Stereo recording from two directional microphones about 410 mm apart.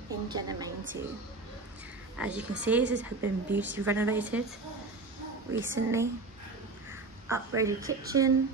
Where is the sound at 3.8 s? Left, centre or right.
Centre.